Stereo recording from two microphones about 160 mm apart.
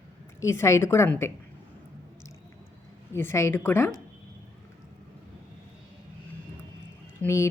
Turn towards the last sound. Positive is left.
turn(degrees=15)  # may be behind; listen again after turning